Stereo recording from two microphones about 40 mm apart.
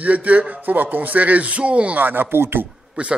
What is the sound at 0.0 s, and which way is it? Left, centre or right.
Speech, right.